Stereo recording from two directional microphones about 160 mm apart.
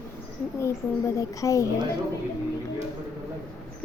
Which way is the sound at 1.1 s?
20° left (ahead or behind).